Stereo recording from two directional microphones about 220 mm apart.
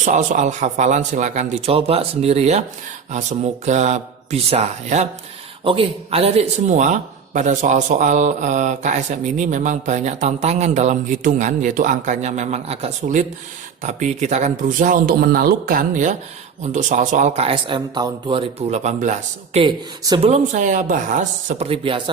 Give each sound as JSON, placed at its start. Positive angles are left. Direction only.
{"t": 0.0, "sound": "speech", "side_deg": -35}
{"t": 19.6, "sound": "speech", "side_deg": -20}